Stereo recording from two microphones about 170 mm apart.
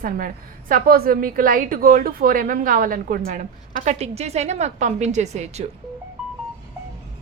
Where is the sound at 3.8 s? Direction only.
40° right (ahead or behind).